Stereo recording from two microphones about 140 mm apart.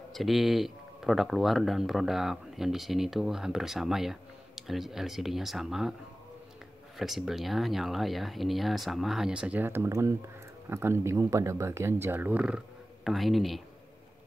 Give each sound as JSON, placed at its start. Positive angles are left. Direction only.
{"t": 0.1, "sound": "speech", "side_deg": 0}
{"t": 7.0, "sound": "speech", "side_deg": 0}